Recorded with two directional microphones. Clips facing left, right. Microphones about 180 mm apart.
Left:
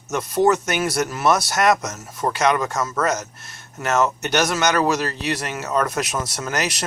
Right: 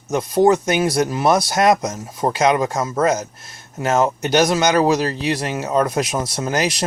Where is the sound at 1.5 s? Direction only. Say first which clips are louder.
Right 3 dB; 30° right (ahead or behind).